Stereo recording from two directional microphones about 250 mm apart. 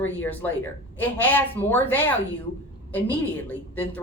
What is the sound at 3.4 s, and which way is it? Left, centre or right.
Speech, centre.